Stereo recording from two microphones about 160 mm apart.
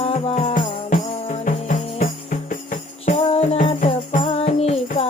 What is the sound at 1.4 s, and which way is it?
Music, 55° left (ahead or behind).